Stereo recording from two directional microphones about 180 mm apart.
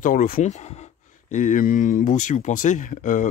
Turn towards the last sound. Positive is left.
turn(degrees=45)  # may be behind; listen again after turning